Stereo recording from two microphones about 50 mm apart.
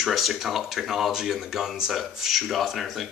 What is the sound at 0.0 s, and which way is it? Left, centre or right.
Speech, centre.